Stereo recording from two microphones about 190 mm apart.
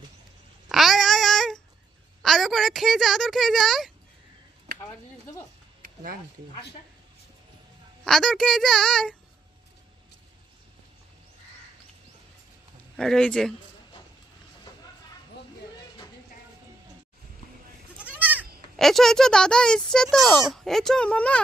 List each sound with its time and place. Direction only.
0.7 s babbling: centre (ahead or behind)
2.2 s speech: centre (ahead or behind)
5.8 s a sound: 45° right (ahead or behind)
8.0 s a child's voice: centre (ahead or behind)
13.0 s a child's voice: 5° left (ahead or behind)
17.9 s goat: 10° right (ahead or behind)
18.9 s a child's voice: centre (ahead or behind)